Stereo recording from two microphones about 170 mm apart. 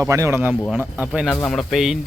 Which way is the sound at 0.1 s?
15° right (ahead or behind).